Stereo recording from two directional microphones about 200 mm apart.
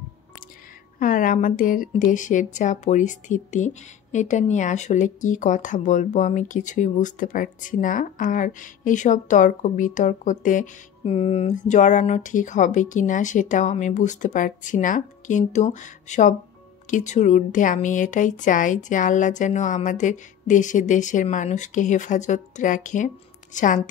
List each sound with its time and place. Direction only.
0.9 s speech: 40° left (ahead or behind)